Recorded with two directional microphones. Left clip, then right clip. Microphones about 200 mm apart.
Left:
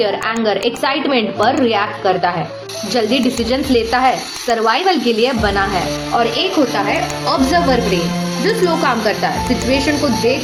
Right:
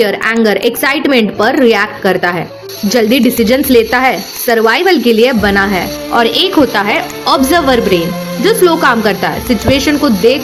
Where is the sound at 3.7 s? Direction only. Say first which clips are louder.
Right 7 dB; 50° right (ahead or behind).